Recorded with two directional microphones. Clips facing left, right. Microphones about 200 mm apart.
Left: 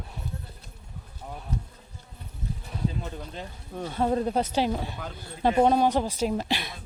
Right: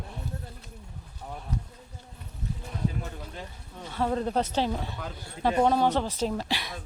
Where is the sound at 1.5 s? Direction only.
30° left (ahead or behind).